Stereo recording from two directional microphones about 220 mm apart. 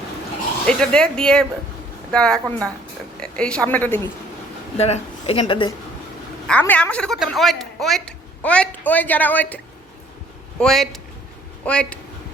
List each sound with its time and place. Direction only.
0.7 s a woman's voice: 5° left (ahead or behind)
4.8 s speech: 25° left (ahead or behind)
6.5 s a woman's voice: 5° left (ahead or behind)
10.6 s a woman's voice: centre (ahead or behind)